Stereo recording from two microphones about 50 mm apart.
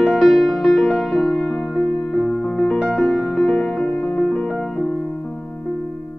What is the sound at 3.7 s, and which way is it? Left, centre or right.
Music, centre.